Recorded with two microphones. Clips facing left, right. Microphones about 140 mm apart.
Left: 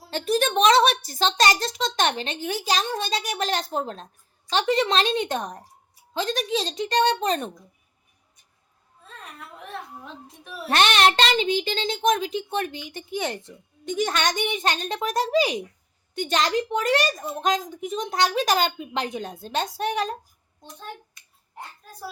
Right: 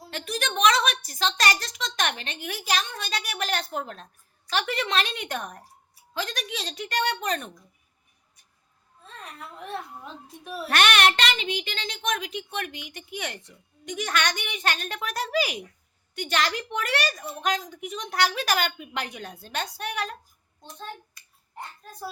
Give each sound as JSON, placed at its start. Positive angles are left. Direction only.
{"t": 0.1, "sound": "a woman's voice", "side_deg": 30}
{"t": 10.7, "sound": "a woman's voice", "side_deg": 25}
{"t": 21.2, "sound": "finger snapping", "side_deg": 20}